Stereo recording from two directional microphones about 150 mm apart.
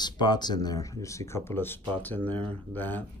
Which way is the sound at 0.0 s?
30° left (ahead or behind).